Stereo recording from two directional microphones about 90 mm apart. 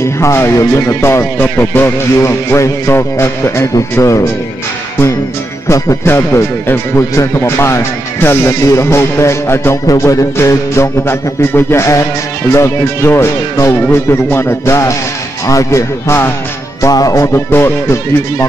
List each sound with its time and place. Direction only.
0.0 s speech: 30° left (ahead or behind)
4.0 s music: 35° left (ahead or behind)
5.7 s speech: 30° left (ahead or behind)
9.8 s music: 35° left (ahead or behind)
12.5 s speech: 30° left (ahead or behind)
15.4 s music: 35° left (ahead or behind)
17.5 s speech: 25° left (ahead or behind)